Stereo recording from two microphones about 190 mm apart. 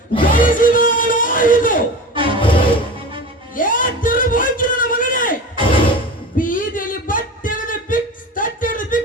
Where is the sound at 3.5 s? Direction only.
45° left (ahead or behind).